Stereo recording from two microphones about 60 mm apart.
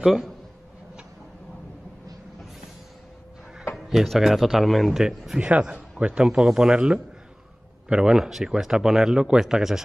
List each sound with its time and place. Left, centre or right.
0.0 s speech: centre
3.7 s speech: centre
5.0 s speech: centre